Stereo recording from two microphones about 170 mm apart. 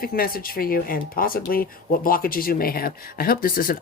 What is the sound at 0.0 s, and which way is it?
Speech, 60° left (ahead or behind).